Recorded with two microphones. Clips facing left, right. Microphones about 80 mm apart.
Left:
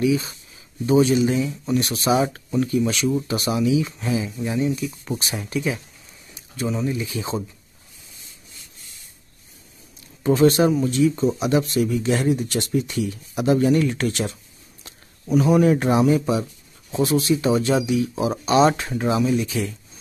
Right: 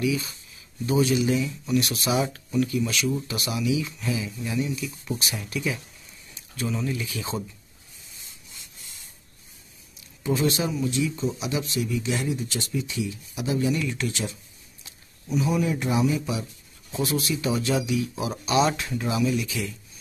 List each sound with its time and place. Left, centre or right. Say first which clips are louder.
0.0 s speech: left 5 dB; left
10.2 s speech: left 9 dB; left
16.9 s speech: left 7 dB; left